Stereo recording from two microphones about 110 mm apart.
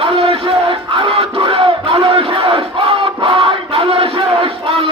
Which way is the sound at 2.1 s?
55° right (ahead or behind).